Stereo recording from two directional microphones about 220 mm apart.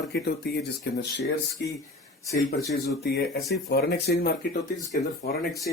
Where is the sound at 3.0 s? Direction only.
45° left (ahead or behind).